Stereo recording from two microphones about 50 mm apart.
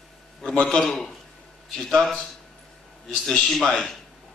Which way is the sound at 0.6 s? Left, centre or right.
Centre.